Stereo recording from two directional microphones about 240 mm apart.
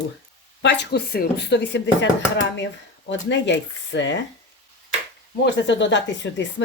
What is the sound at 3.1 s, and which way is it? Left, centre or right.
Speech, left.